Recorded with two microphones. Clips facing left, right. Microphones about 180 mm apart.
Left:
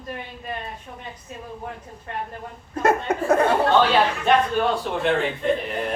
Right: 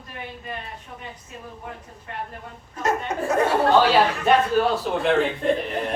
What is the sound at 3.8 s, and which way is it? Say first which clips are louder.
A man's voice: right 1 dB; 5° right (ahead or behind).